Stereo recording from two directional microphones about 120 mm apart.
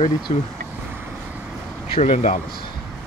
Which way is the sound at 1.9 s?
60° left (ahead or behind).